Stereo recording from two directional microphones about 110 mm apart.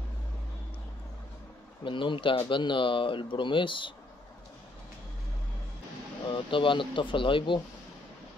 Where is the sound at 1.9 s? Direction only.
50° left (ahead or behind).